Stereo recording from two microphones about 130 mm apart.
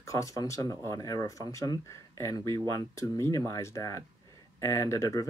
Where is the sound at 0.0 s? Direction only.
25° left (ahead or behind).